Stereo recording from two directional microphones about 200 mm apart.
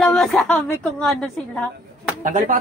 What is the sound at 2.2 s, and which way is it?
Speech, 40° right (ahead or behind).